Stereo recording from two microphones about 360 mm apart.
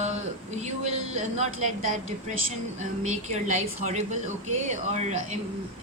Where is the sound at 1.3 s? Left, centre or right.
Centre.